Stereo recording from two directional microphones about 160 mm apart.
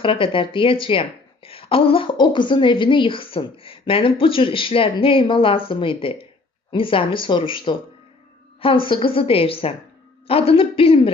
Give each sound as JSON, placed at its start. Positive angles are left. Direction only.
{"t": 0.0, "sound": "speech", "side_deg": 35}